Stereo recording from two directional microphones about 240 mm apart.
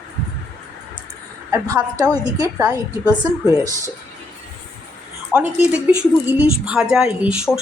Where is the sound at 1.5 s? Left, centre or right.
Centre.